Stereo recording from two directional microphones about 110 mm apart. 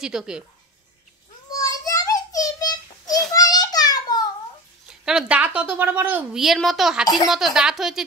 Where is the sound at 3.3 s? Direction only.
35° left (ahead or behind).